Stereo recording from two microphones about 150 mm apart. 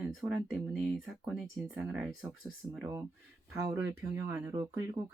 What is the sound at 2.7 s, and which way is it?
Speech, 15° right (ahead or behind).